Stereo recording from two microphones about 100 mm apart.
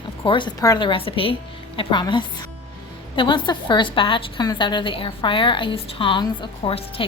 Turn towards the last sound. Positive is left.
turn(degrees=60)  # may be behind; listen again after turning